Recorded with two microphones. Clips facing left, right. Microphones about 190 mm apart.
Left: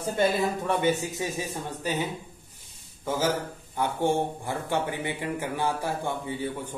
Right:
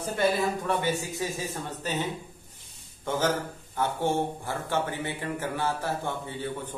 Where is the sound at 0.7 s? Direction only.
20° left (ahead or behind).